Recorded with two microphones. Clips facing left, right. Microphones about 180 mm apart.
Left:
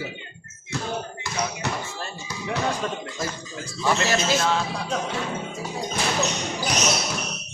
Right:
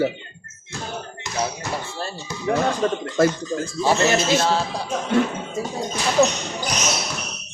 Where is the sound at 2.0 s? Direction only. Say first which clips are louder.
Right 4 dB; 35° right (ahead or behind).